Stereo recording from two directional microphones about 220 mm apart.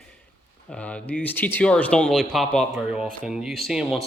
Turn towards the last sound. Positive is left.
turn(degrees=0)  # may be behind; listen again after turning